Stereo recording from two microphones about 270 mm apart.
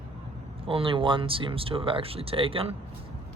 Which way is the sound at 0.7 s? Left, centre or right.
Centre.